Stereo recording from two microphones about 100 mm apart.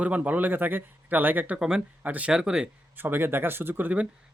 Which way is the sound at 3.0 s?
20° right (ahead or behind).